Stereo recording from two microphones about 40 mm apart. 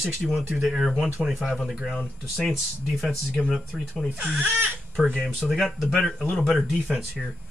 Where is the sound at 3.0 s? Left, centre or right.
Centre.